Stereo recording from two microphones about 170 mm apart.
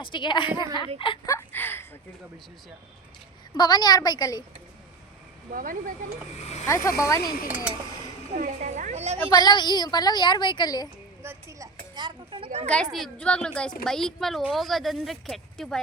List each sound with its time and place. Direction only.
0.0 s a woman's voice: 30° left (ahead or behind)
1.3 s speech: 10° left (ahead or behind)
3.6 s a woman's voice: 25° left (ahead or behind)
5.5 s speech: 55° right (ahead or behind)
6.8 s speech: 15° left (ahead or behind)
8.3 s a woman's voice: 40° right (ahead or behind)
9.3 s a woman's voice: 25° left (ahead or behind)
11.2 s speech: 15° right (ahead or behind); by 12.6 s 35° right (ahead or behind)
12.6 s speech: 5° left (ahead or behind)